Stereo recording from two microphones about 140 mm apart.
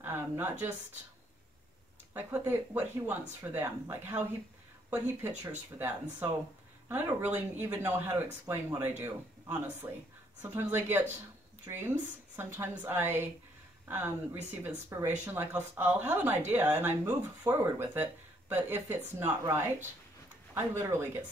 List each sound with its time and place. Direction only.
0.0 s speech: 15° right (ahead or behind)
2.1 s speech: 15° right (ahead or behind)